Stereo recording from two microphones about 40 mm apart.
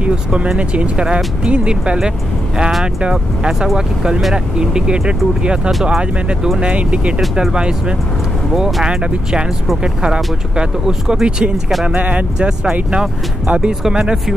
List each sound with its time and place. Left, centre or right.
0.0 s speech: right
6.6 s speech: right
8.8 s speech: right
10.9 s speech: centre
11.9 s speech: right
12.4 s speech: right